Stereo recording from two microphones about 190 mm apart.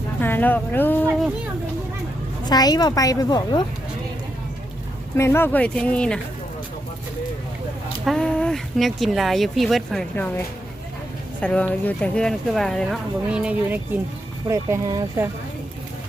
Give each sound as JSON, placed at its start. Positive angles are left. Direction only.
{"t": 0.2, "sound": "speech", "side_deg": 10}
{"t": 2.5, "sound": "a woman's voice", "side_deg": 20}
{"t": 5.1, "sound": "speech", "side_deg": 15}
{"t": 8.0, "sound": "speech", "side_deg": 5}